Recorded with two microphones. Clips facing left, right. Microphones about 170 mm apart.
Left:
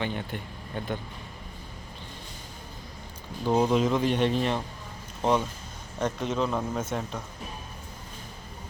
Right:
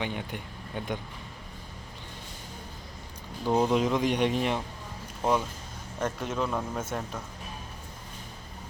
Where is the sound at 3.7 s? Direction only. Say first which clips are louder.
Left 1 dB; 10° right (ahead or behind).